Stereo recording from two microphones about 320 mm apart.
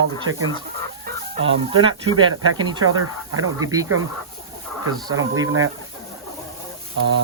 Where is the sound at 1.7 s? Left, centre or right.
Right.